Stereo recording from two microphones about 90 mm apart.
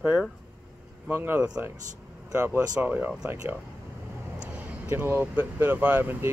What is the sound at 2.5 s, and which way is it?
Speech, 45° right (ahead or behind).